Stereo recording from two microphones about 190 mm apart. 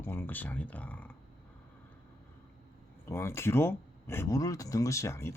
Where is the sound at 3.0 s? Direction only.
15° left (ahead or behind).